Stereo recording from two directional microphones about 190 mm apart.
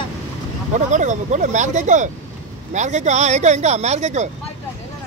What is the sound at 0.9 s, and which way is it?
Speech, 40° right (ahead or behind).